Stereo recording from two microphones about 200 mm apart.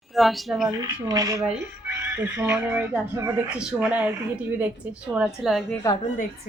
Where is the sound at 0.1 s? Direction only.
Centre (ahead or behind).